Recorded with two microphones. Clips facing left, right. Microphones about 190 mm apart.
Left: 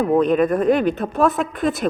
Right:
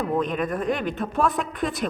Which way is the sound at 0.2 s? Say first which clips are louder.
Left 9 dB; 40° left (ahead or behind).